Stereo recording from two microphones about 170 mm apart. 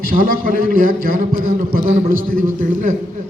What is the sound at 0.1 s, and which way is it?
A man's voice, 55° right (ahead or behind).